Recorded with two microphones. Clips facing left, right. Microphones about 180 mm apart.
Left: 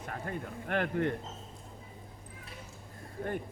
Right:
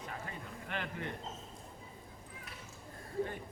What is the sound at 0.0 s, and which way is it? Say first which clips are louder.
A man's voice: left 6 dB; 50° left (ahead or behind).